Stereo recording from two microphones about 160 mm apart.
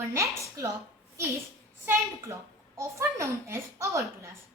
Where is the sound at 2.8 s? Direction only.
15° right (ahead or behind).